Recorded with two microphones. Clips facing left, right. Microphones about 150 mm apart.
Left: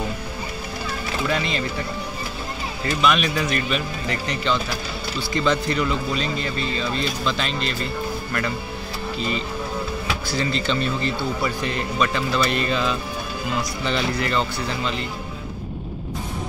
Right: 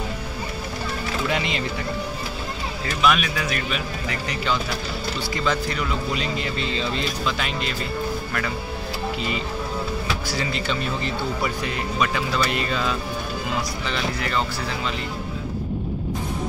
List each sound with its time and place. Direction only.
1.3 s speech: 15° right (ahead or behind)
3.0 s speech: 5° right (ahead or behind)
6.1 s speech: 15° right (ahead or behind)
7.2 s speech: 10° right (ahead or behind)
10.3 s speech: 10° right (ahead or behind)